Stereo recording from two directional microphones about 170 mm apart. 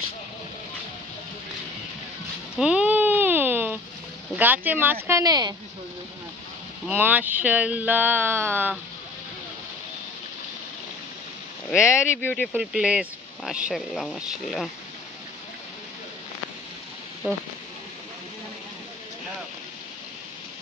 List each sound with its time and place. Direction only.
2.6 s a sound: 5° right (ahead or behind)
4.4 s speech: 10° right (ahead or behind)
6.9 s speech: 10° right (ahead or behind)
11.7 s speech: 5° right (ahead or behind)